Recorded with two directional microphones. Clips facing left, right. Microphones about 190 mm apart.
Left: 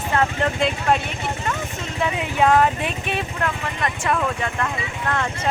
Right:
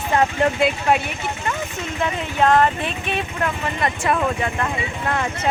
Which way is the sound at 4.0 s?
10° right (ahead or behind).